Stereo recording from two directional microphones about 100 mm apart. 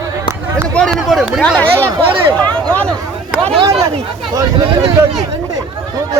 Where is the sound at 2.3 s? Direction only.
15° left (ahead or behind).